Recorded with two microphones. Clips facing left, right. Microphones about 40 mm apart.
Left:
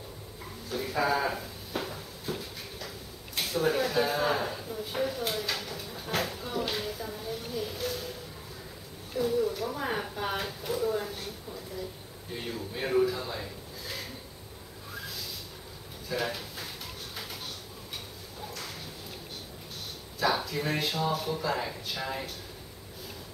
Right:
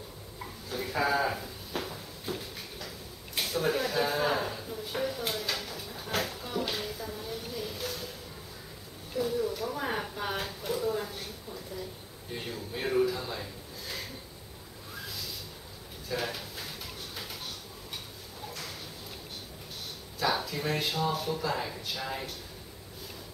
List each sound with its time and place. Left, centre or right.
0.7 s drawer open or close: centre
3.3 s a sound: centre
9.1 s speech: centre
12.4 s a man's voice: centre
16.1 s speech: centre
17.1 s a sound: centre
20.2 s speech: centre